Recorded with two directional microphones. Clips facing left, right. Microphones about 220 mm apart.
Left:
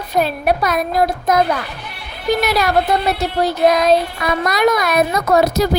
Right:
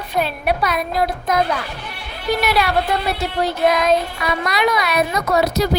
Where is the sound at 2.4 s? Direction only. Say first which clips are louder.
Left 1 dB; 40° left (ahead or behind).